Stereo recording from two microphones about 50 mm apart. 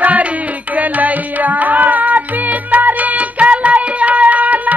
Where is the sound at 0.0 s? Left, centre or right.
Right.